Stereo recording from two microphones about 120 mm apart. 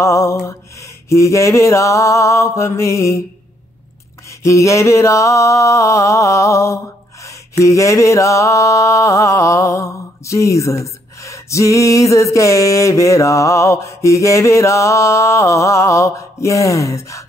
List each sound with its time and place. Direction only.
0.0 s mantra: 25° left (ahead or behind)
4.4 s mantra: 25° left (ahead or behind)